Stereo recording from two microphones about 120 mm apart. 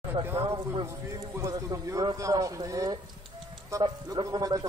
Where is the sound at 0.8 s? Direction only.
25° right (ahead or behind).